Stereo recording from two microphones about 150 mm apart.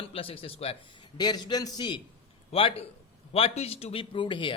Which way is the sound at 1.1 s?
30° left (ahead or behind).